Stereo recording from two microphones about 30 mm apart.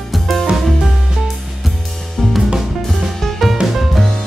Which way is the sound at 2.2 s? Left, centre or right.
Centre.